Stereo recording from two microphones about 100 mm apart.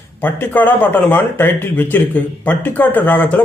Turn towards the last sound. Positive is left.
turn(degrees=20)  # may be behind; listen again after turning